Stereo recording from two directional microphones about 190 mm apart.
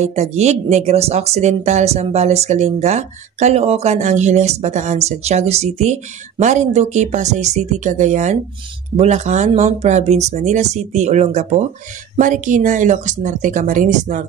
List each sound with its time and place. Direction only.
0.0 s speech: 35° right (ahead or behind)